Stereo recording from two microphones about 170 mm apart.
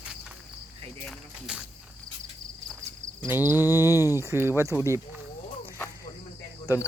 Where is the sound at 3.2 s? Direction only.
15° right (ahead or behind).